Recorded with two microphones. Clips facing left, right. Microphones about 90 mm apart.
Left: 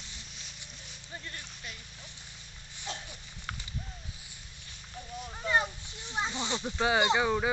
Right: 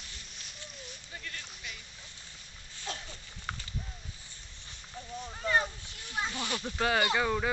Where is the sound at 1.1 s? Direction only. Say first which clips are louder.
Left 2 dB; 25° left (ahead or behind).